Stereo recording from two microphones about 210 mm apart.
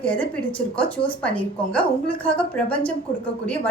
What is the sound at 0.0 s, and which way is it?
A woman's voice, 5° left (ahead or behind).